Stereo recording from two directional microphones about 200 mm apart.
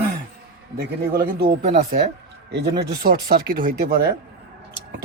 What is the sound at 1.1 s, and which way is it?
Speech, 50° right (ahead or behind).